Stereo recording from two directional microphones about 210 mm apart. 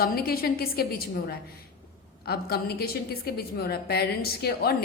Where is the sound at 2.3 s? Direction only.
50° left (ahead or behind).